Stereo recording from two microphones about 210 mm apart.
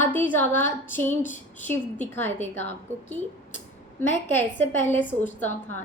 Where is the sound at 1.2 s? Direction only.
35° left (ahead or behind).